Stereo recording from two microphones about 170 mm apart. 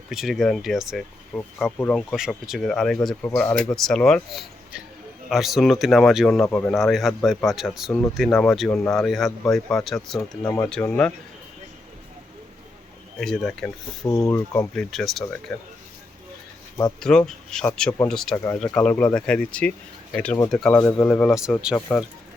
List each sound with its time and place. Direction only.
0.1 s speech: centre (ahead or behind)
6.4 s speech: 10° left (ahead or behind)
6.7 s speech: centre (ahead or behind)
13.1 s speech: 5° left (ahead or behind)
14.0 s speech: 20° left (ahead or behind)
14.8 s speech: centre (ahead or behind)
17.0 s speech: 5° left (ahead or behind)
21.2 s speech: 5° right (ahead or behind)